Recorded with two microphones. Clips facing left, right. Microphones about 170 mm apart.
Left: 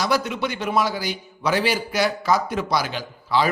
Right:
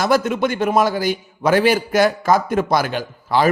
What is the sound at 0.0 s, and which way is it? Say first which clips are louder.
A man's voice: right 6 dB; 50° right (ahead or behind).